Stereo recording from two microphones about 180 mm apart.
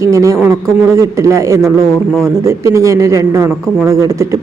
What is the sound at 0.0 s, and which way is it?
A man's voice, 15° right (ahead or behind).